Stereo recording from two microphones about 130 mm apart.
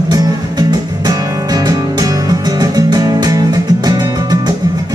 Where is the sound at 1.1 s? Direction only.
30° right (ahead or behind).